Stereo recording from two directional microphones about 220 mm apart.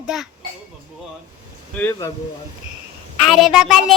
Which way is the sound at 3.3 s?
Centre (ahead or behind).